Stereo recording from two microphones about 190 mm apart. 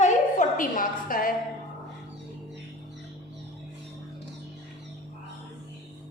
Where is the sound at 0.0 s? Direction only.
40° left (ahead or behind).